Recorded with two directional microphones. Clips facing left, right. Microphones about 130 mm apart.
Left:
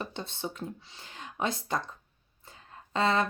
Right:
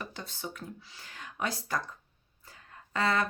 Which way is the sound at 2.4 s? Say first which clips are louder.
Left 2 dB; 25° left (ahead or behind).